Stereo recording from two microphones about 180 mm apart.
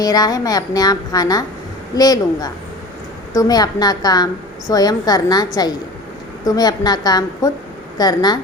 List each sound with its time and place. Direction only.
0.0 s a woman's voice: 20° left (ahead or behind)